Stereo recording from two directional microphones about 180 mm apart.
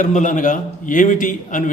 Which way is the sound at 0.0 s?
45° left (ahead or behind).